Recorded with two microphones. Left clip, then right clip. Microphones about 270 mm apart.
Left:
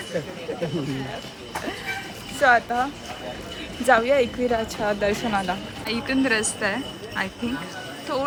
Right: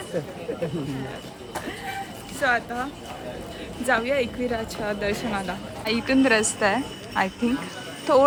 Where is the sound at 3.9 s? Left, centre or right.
Centre.